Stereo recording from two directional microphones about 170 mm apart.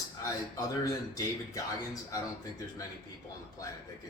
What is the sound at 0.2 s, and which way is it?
Speech, 20° left (ahead or behind).